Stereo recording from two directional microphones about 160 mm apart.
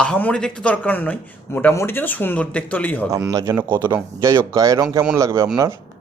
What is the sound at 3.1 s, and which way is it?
Speech, 20° right (ahead or behind).